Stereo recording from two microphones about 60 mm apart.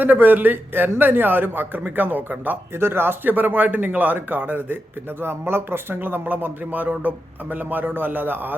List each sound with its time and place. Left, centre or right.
0.0 s speech: right
2.7 s speech: right
5.2 s speech: right